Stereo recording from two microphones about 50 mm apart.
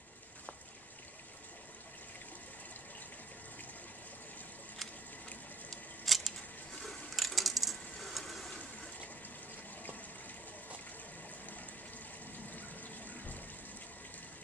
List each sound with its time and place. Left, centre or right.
6.0 s a sound: centre
7.2 s coin: centre
12.5 s water: left